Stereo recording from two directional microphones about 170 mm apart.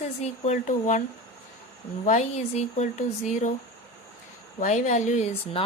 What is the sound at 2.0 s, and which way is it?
Speech, 45° left (ahead or behind).